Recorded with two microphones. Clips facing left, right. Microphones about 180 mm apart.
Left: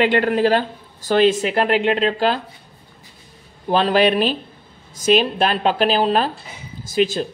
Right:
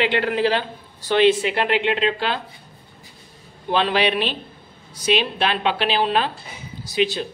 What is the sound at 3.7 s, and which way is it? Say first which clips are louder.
A woman's voice: left 4 dB; 40° left (ahead or behind).